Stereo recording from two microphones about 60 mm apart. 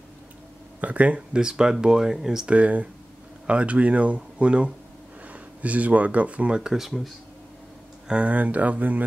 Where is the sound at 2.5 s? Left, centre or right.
Right.